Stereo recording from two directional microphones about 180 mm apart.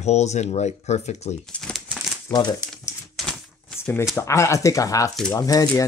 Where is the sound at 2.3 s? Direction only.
20° left (ahead or behind).